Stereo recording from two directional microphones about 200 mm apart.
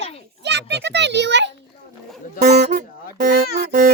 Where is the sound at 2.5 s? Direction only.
35° right (ahead or behind).